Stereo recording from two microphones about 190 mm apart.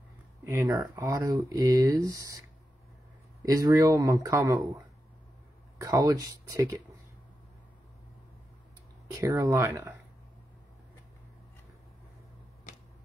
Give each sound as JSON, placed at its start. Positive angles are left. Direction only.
{"t": 0.5, "sound": "speech", "side_deg": -15}
{"t": 3.4, "sound": "speech", "side_deg": -20}
{"t": 5.8, "sound": "speech", "side_deg": -20}
{"t": 9.2, "sound": "speech", "side_deg": -15}